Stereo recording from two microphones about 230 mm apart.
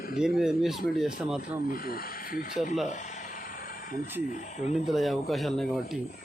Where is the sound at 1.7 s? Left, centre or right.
Left.